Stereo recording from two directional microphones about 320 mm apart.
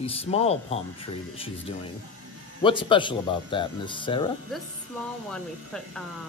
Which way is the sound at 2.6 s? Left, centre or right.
Centre.